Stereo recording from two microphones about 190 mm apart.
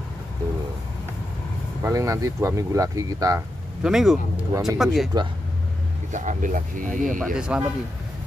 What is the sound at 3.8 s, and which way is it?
Speech, 5° right (ahead or behind).